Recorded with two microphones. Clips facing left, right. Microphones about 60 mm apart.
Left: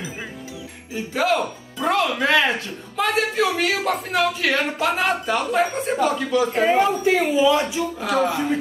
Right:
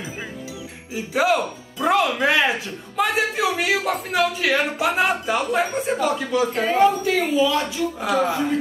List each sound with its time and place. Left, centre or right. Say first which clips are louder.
0.9 s a man's voice: right 1 dB; centre
6.5 s speech: right 2 dB; centre
8.0 s speech: even; centre